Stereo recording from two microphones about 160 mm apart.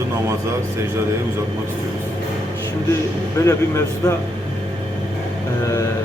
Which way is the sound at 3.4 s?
20° left (ahead or behind).